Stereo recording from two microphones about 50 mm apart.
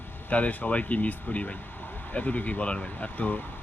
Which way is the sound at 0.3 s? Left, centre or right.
Left.